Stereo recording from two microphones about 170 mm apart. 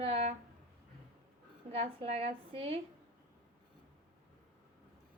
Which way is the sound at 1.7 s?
35° right (ahead or behind).